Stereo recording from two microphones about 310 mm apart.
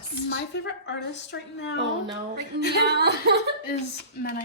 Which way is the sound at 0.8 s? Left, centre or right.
Left.